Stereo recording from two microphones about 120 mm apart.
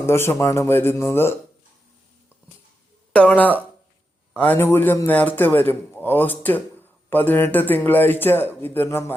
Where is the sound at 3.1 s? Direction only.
10° left (ahead or behind).